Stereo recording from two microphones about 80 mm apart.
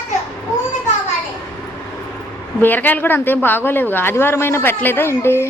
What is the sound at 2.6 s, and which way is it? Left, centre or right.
Speech, left.